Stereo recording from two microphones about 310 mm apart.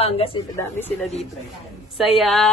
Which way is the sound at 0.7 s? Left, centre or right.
Centre.